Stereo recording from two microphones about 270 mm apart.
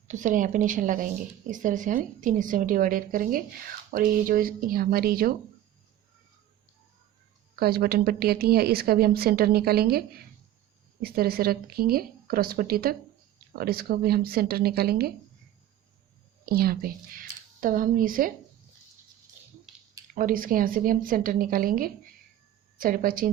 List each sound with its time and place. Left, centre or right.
0.1 s speech: right
7.5 s a woman's voice: right
16.5 s speech: right
20.1 s a woman's voice: right